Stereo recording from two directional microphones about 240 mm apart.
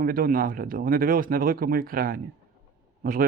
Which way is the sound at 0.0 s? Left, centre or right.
Right.